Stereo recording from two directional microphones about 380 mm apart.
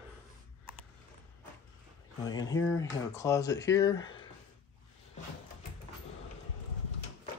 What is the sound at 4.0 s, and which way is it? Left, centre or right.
Speech, left.